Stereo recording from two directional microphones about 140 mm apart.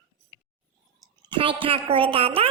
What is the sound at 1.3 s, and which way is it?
A woman's voice, 40° right (ahead or behind).